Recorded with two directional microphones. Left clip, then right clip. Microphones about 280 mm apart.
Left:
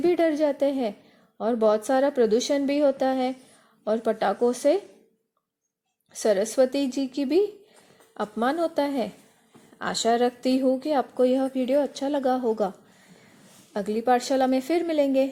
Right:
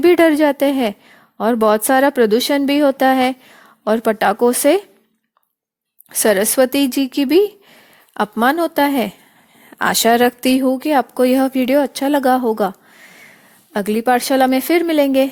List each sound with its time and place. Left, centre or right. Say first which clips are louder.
0.0 s speech: right 10 dB; right
6.1 s speech: right 8 dB; right
13.7 s speech: right 7 dB; right